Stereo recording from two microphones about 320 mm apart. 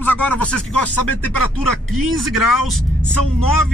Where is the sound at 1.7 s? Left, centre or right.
Right.